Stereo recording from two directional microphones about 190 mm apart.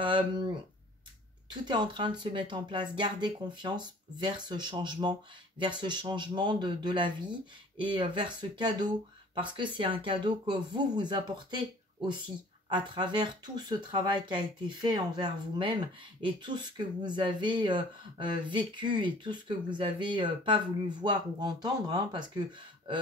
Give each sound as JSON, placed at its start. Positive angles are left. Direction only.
{"t": 0.0, "sound": "speech", "side_deg": -25}
{"t": 1.5, "sound": "speech", "side_deg": -25}
{"t": 12.6, "sound": "speech", "side_deg": -25}